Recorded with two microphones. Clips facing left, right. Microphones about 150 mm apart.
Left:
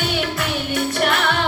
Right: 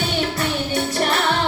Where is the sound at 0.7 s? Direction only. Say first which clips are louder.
Left 3 dB; 35° right (ahead or behind).